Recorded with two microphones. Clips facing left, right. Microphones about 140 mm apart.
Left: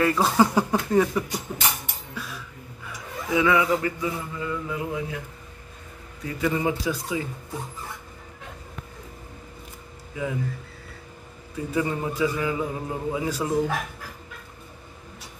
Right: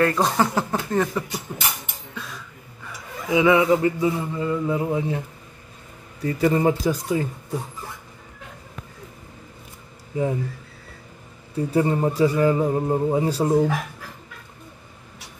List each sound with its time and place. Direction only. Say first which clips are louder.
0.0 s speech: even; 5° left (ahead or behind)
2.1 s a sound: even; 5° left (ahead or behind)
3.3 s mantra: right 4 dB; 20° right (ahead or behind)
6.4 s a man's voice: right 5 dB; 40° right (ahead or behind)
10.1 s a man's voice: right 6 dB; 35° right (ahead or behind)
11.5 s a man's voice: right 5 dB; 35° right (ahead or behind)